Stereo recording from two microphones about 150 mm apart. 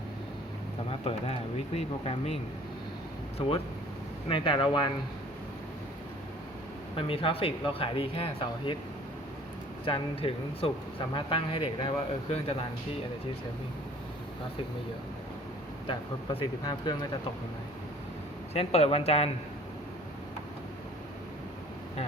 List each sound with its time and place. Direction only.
0.9 s speech: 40° left (ahead or behind)
4.3 s speech: 35° left (ahead or behind)
6.9 s speech: 35° left (ahead or behind)
9.8 s speech: 35° left (ahead or behind)
15.9 s speech: 35° left (ahead or behind)
18.5 s speech: 45° left (ahead or behind)